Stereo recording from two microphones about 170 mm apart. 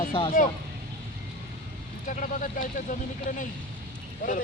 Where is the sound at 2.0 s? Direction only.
50° left (ahead or behind).